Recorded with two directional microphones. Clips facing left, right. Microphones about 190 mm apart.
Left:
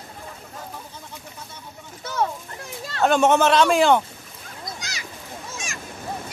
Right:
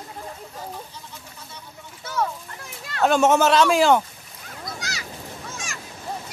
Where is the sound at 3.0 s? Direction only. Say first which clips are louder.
Even; 5° right (ahead or behind).